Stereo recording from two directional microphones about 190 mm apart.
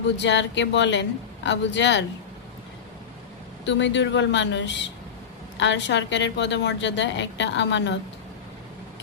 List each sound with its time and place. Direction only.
0.2 s a woman's voice: 70° left (ahead or behind)
3.7 s a woman's voice: 70° left (ahead or behind)